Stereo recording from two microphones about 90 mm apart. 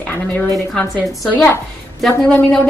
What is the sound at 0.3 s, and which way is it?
Speech, 15° left (ahead or behind).